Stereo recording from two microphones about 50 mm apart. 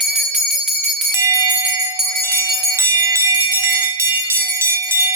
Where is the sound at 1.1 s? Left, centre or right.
Right.